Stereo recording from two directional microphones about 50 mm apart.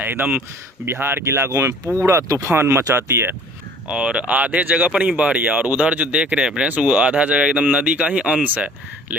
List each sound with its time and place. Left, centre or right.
0.0 s speech: right
0.9 s speech: right
1.2 s speech: right
2.5 s speech: right
3.8 s speech: right
8.4 s speech: right